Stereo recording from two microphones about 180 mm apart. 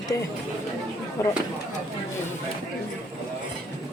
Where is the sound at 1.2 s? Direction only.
15° left (ahead or behind).